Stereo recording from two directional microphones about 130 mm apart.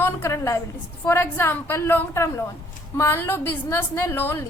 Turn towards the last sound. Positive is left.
turn(degrees=20)  # may be behind; listen again after turning